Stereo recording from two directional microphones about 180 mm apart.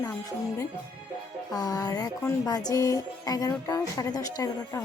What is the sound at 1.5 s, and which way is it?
Music, 20° left (ahead or behind).